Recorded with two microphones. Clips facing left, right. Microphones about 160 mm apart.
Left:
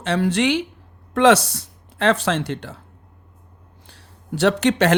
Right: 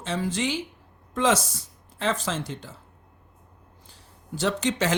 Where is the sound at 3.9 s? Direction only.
70° left (ahead or behind).